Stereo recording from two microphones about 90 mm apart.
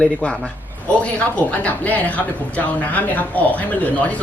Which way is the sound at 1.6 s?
15° left (ahead or behind).